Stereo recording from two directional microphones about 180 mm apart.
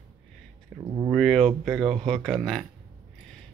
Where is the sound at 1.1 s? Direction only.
Centre (ahead or behind).